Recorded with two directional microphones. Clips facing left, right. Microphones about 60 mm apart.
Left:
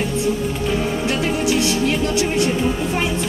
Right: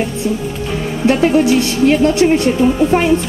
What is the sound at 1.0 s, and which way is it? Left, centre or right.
Speech, right.